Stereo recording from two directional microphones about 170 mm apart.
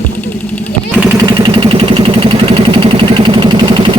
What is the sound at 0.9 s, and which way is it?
Vehicle, 10° right (ahead or behind).